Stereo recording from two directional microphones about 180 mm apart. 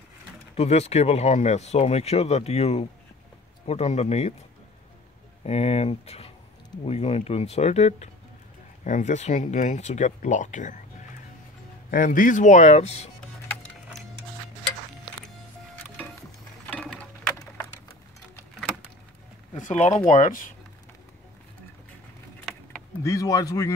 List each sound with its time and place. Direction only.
0.6 s speech: 35° left (ahead or behind)
5.4 s speech: 35° left (ahead or behind)
11.9 s speech: 50° left (ahead or behind)
16.7 s a sound: 10° left (ahead or behind)
19.5 s speech: 40° left (ahead or behind)
22.4 s a sound: centre (ahead or behind)
23.0 s speech: 15° left (ahead or behind)